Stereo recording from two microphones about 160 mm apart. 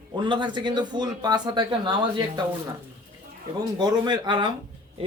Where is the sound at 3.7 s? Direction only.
25° right (ahead or behind).